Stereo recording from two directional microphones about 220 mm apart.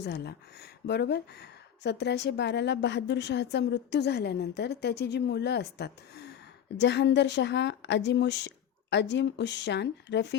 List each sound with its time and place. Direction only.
0.0 s a woman's voice: 50° left (ahead or behind)